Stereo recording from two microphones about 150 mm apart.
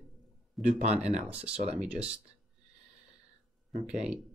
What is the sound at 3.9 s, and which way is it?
Speech, 5° right (ahead or behind).